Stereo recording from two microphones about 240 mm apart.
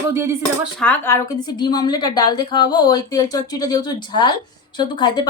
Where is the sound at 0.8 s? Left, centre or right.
Centre.